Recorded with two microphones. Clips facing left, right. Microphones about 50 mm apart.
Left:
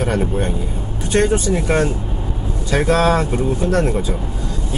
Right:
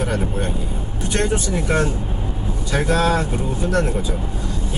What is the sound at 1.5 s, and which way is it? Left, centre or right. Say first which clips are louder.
Speech: left 3 dB; left.